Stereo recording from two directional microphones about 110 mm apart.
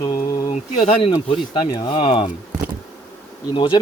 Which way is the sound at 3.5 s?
50° left (ahead or behind).